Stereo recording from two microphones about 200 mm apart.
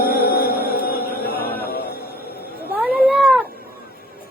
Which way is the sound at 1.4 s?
50° left (ahead or behind).